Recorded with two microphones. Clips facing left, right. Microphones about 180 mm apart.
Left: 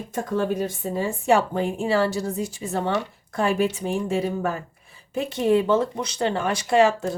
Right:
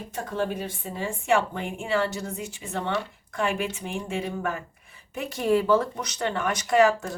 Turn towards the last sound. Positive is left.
turn(degrees=25)  # may be behind; listen again after turning